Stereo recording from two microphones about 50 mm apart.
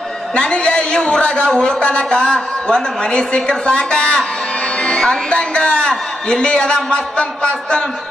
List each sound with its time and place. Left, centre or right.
0.3 s a man's voice: left